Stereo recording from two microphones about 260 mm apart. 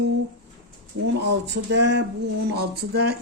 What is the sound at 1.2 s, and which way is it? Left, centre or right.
Speech, right.